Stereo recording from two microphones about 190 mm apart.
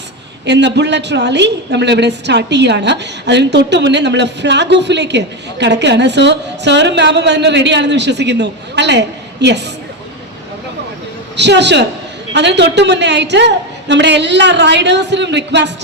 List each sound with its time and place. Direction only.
0.4 s a woman's voice: 65° right (ahead or behind)
11.3 s a woman's voice: 65° right (ahead or behind)